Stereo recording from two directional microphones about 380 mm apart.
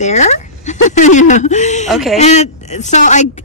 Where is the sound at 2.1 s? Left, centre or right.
Centre.